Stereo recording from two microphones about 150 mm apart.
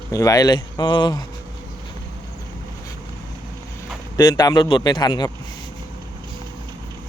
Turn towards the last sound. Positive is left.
turn(degrees=25)  # may be behind; listen again after turning